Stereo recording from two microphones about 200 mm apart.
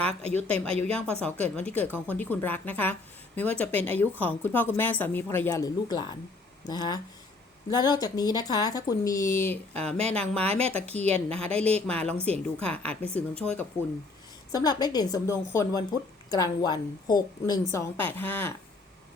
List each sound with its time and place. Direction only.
0.3 s a woman's voice: 5° left (ahead or behind)
14.5 s a woman's voice: 20° left (ahead or behind)